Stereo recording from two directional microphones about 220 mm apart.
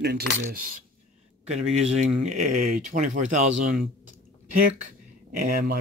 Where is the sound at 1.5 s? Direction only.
30° right (ahead or behind).